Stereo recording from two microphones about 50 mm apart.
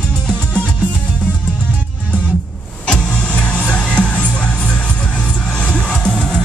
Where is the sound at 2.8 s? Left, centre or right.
Centre.